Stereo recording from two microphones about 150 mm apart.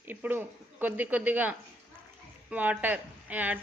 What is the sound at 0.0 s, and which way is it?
A woman's voice, 15° right (ahead or behind).